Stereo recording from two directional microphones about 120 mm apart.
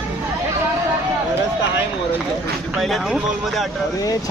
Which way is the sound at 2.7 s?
Centre (ahead or behind).